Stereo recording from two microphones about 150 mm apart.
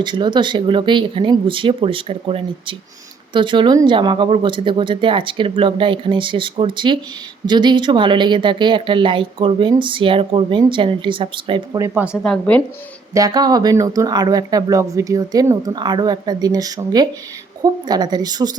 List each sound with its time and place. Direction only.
0.0 s a woman's voice: 30° right (ahead or behind)
11.8 s speech: 10° right (ahead or behind)
12.2 s speech: 5° left (ahead or behind)
13.1 s speech: 25° right (ahead or behind)